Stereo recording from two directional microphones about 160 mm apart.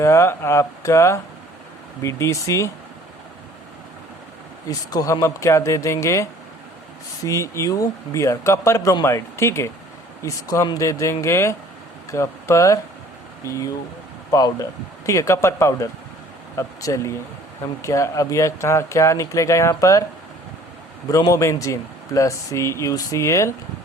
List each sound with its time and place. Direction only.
0.0 s speech: 15° left (ahead or behind)
4.9 s speech: 25° left (ahead or behind)
21.1 s speech: 20° left (ahead or behind)